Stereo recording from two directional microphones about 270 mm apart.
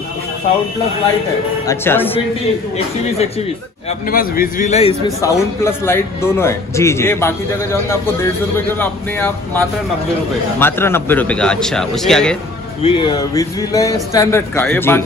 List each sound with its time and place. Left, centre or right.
1.7 s speech: centre
4.1 s a man's voice: left
5.2 s a man's voice: centre
12.8 s speech: centre